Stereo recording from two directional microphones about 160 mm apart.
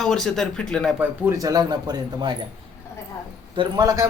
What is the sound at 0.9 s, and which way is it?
A man's voice, 15° right (ahead or behind).